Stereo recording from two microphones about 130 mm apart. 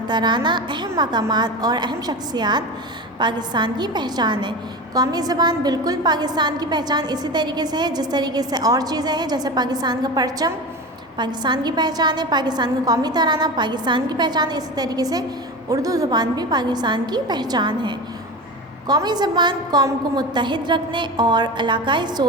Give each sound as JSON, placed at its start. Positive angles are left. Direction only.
{"t": 0.1, "sound": "a woman's voice", "side_deg": -35}